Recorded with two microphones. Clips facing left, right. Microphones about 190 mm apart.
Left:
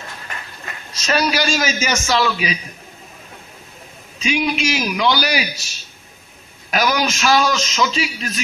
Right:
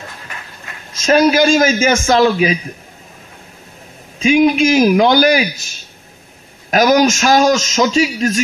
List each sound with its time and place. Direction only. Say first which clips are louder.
0.9 s a man's voice: right 8 dB; 50° right (ahead or behind)
4.2 s a man's voice: right 9 dB; 50° right (ahead or behind)
6.7 s a man's voice: right 8 dB; 45° right (ahead or behind)